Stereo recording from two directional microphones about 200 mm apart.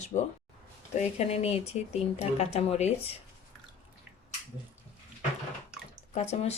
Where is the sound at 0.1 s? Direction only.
35° left (ahead or behind).